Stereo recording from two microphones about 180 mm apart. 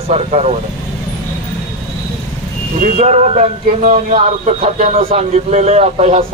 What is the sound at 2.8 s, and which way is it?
Speech, 40° right (ahead or behind).